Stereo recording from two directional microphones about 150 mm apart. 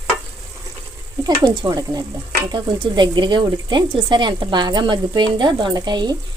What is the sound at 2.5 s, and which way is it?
Speech, 30° right (ahead or behind).